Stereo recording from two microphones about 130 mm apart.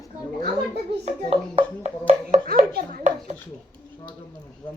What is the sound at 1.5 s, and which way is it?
Speech, 50° right (ahead or behind).